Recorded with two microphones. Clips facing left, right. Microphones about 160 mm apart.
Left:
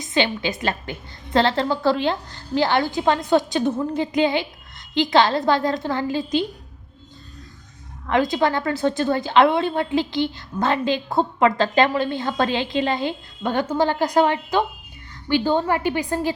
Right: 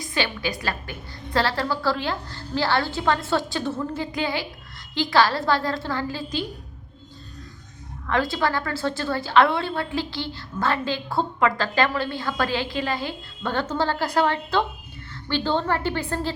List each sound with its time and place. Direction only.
0.0 s a woman's voice: 20° left (ahead or behind)
8.0 s a woman's voice: 20° left (ahead or behind)